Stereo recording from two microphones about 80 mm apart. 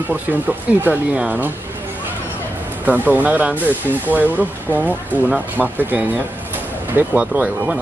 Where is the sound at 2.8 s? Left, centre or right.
Right.